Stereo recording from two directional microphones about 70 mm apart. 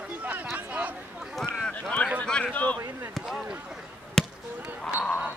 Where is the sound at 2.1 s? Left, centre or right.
Centre.